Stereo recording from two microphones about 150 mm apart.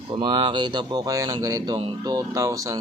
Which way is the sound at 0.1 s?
35° right (ahead or behind).